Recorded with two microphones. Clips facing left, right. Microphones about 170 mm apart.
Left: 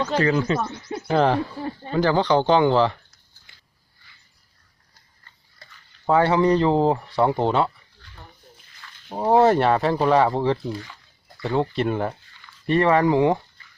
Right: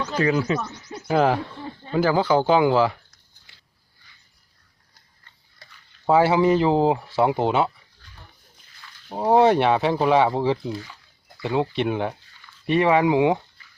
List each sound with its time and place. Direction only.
0.2 s speech: 10° right (ahead or behind)
0.6 s a sound: 55° left (ahead or behind)
1.0 s speech: 5° right (ahead or behind)
6.1 s speech: 5° right (ahead or behind)
9.0 s speech: centre (ahead or behind)